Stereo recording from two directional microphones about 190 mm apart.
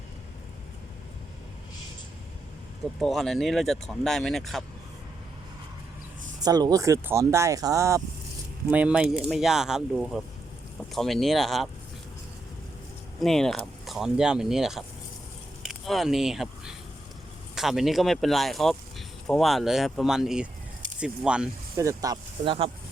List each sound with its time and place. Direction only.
3.0 s speech: centre (ahead or behind)
6.4 s speech: 20° right (ahead or behind); by 11.7 s centre (ahead or behind)
13.2 s speech: centre (ahead or behind)
21.8 s speech: 15° right (ahead or behind)